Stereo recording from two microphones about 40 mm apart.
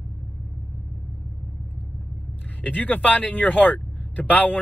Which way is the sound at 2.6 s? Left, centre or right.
Left.